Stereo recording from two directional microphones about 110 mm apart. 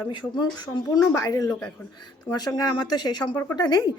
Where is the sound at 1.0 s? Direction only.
30° left (ahead or behind).